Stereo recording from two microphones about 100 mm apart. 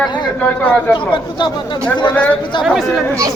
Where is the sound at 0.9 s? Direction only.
55° left (ahead or behind).